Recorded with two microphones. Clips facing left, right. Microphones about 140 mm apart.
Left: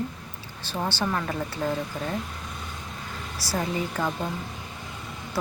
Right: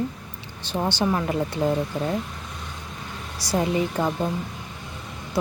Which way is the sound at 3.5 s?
20° right (ahead or behind).